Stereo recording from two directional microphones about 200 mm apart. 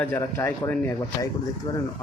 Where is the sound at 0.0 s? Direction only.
10° left (ahead or behind).